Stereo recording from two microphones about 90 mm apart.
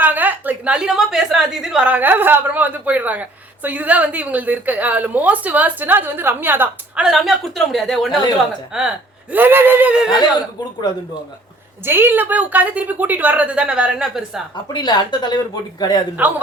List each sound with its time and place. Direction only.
0.0 s a woman's voice: 20° right (ahead or behind)
1.9 s a woman's voice: 20° right (ahead or behind)
7.0 s a woman's voice: 5° right (ahead or behind)
9.3 s a woman's voice: 25° right (ahead or behind)
11.9 s a woman's voice: 25° right (ahead or behind); by 14.4 s 5° right (ahead or behind)
14.5 s speech: 55° left (ahead or behind)
16.2 s a woman's voice: 15° right (ahead or behind)